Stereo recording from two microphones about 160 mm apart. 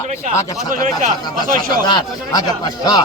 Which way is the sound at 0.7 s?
50° right (ahead or behind).